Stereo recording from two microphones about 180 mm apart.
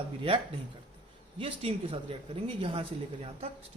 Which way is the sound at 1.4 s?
30° right (ahead or behind).